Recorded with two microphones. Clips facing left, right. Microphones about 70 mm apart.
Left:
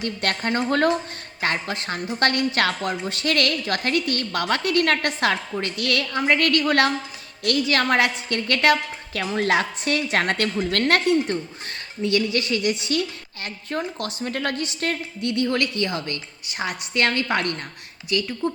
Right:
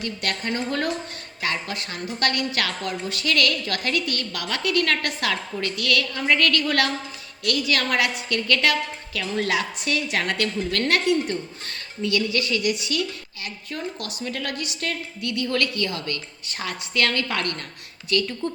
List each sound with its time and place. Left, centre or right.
0.0 s a woman's voice: left
1.4 s a woman's voice: left; by 18.5 s centre